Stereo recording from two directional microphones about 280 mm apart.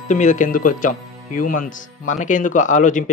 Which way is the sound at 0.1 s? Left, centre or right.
Left.